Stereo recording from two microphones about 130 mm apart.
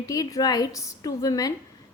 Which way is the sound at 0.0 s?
25° left (ahead or behind).